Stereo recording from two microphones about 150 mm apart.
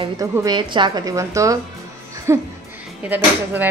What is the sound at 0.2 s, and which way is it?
A woman's voice, 25° right (ahead or behind).